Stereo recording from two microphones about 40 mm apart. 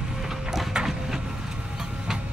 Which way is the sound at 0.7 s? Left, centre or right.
Right.